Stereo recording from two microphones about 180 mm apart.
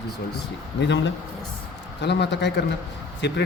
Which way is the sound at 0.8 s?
80° left.